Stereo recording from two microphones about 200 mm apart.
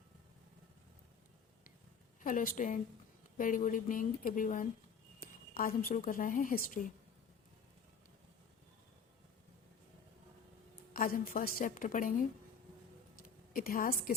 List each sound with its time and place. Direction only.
2.2 s speech: 40° left (ahead or behind)
10.9 s a woman's voice: 45° left (ahead or behind)
13.2 s a woman's voice: 45° left (ahead or behind)